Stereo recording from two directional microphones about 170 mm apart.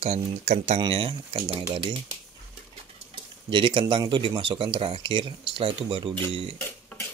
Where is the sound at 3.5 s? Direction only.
30° right (ahead or behind).